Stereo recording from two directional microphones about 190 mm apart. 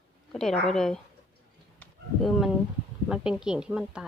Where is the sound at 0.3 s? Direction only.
5° left (ahead or behind).